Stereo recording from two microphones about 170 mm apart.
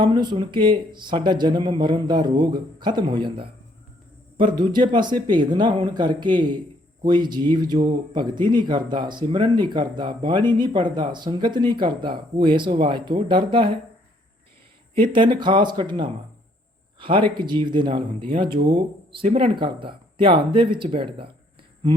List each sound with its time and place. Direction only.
0.0 s speech: 25° right (ahead or behind)
14.9 s speech: 30° right (ahead or behind)